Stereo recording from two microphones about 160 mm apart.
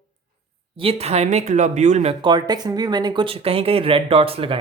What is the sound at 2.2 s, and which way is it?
Speech, 25° right (ahead or behind).